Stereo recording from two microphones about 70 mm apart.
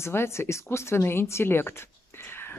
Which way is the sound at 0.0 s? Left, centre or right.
Left.